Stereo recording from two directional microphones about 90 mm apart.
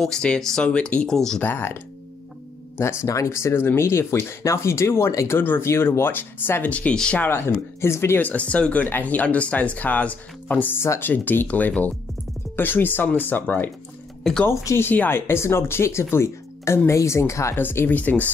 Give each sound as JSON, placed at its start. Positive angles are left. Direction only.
{"t": 0.0, "sound": "speech", "side_deg": 10}
{"t": 1.4, "sound": "speech", "side_deg": 25}
{"t": 2.8, "sound": "speech", "side_deg": 30}
{"t": 7.2, "sound": "speech", "side_deg": 25}
{"t": 14.5, "sound": "speech", "side_deg": 35}
{"t": 14.9, "sound": "speech", "side_deg": 25}
{"t": 17.6, "sound": "speech", "side_deg": 20}